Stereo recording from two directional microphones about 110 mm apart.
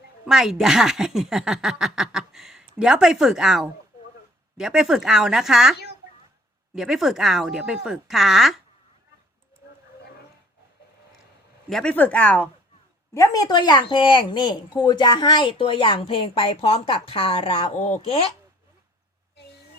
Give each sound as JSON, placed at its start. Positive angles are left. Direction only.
{"t": 0.3, "sound": "speech", "side_deg": -5}
{"t": 6.7, "sound": "speech", "side_deg": -5}
{"t": 11.7, "sound": "speech", "side_deg": 10}
{"t": 13.1, "sound": "a woman's voice", "side_deg": 30}